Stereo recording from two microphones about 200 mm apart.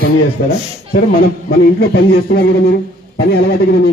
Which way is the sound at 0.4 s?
45° left (ahead or behind).